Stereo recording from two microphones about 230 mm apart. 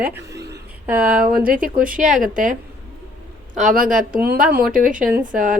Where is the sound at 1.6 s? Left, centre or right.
Right.